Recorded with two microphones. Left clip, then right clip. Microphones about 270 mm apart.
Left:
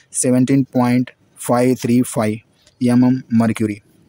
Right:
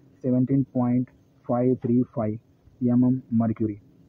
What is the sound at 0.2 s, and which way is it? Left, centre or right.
Speech, left.